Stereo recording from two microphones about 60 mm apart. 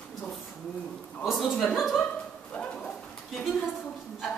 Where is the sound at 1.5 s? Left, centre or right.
Centre.